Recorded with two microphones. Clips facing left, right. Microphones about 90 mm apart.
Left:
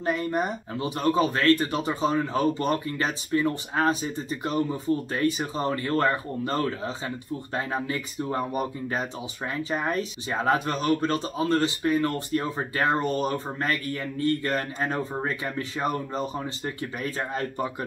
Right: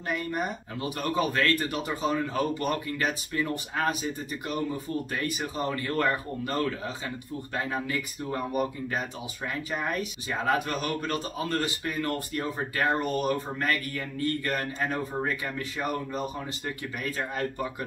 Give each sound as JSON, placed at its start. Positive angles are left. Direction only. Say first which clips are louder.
{"t": 0.0, "sound": "speech", "louder": "left 4 dB", "side_deg": 30}
{"t": 17.0, "sound": "speech", "louder": "left 1 dB", "side_deg": 25}